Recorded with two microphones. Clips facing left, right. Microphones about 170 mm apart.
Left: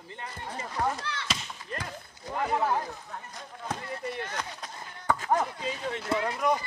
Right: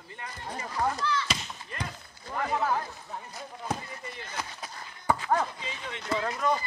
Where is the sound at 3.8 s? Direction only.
70° left (ahead or behind).